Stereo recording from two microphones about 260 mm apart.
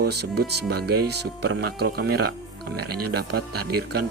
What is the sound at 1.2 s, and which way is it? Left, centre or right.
Speech, right.